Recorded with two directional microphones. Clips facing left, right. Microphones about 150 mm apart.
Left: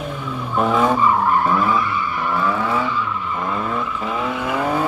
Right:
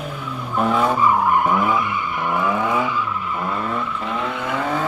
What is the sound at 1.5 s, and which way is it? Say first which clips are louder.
Skidding: left 1 dB; 20° right (ahead or behind).